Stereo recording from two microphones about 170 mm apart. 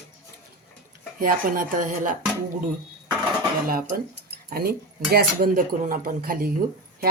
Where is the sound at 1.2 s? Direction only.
55° right (ahead or behind).